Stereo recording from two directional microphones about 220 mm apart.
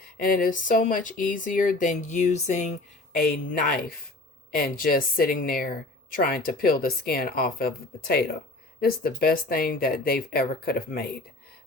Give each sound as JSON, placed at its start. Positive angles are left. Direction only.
{"t": 0.0, "sound": "speech", "side_deg": 40}